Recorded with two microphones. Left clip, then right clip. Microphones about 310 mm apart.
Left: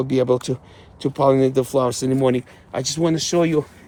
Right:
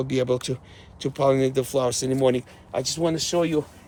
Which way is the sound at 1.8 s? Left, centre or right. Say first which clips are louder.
Left 2 dB; centre.